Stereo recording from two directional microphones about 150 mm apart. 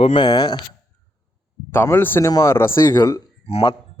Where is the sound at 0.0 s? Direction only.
30° left (ahead or behind).